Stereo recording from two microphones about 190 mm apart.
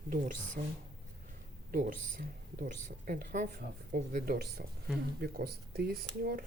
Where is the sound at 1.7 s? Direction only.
45° right (ahead or behind).